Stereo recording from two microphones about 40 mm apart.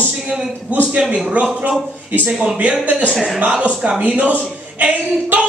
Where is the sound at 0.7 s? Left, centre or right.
Right.